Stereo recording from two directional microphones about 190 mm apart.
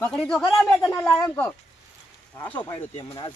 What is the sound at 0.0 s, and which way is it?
Speech, 5° left (ahead or behind).